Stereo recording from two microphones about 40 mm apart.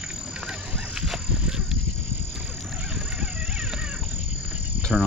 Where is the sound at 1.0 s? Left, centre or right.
Centre.